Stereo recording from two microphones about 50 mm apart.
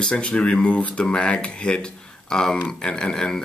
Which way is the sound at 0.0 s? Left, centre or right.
Centre.